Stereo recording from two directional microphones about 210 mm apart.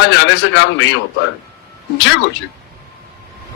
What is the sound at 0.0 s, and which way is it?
Speech, 55° left (ahead or behind).